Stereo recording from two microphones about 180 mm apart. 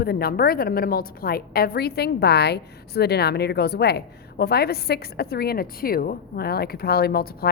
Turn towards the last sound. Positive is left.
turn(degrees=60)  # may be behind; listen again after turning